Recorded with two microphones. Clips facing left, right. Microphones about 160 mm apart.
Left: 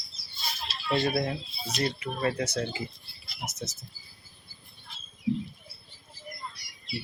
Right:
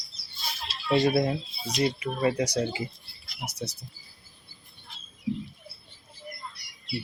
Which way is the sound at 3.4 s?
35° right (ahead or behind).